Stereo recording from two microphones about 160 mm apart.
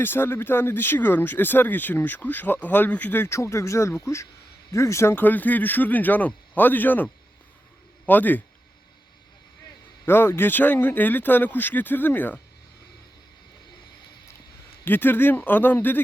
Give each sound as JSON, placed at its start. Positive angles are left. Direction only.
{"t": 0.0, "sound": "speech", "side_deg": 15}
{"t": 10.1, "sound": "speech", "side_deg": 15}
{"t": 14.8, "sound": "speech", "side_deg": 15}